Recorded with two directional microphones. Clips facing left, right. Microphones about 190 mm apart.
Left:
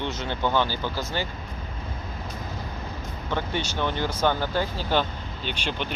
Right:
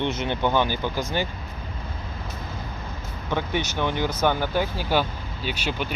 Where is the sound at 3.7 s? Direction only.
15° right (ahead or behind).